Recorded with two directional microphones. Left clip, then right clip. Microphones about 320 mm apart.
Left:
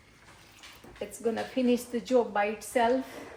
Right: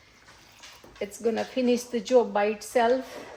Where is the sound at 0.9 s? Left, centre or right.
Right.